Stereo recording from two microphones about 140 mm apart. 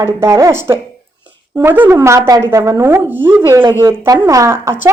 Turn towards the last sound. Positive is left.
turn(degrees=-15)  # may be behind; listen again after turning